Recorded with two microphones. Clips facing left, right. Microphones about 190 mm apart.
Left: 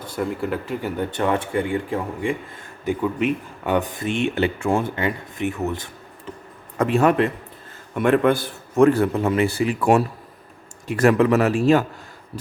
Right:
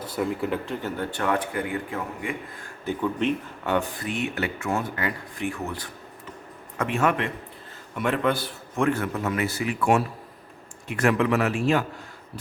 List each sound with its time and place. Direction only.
0.1 s speech: centre (ahead or behind); by 2.3 s 30° left (ahead or behind)
2.8 s speech: 10° left (ahead or behind)
3.8 s speech: 20° left (ahead or behind)
6.7 s a man's voice: 35° left (ahead or behind)
7.9 s a man's voice: 55° left (ahead or behind); by 11.9 s 40° left (ahead or behind)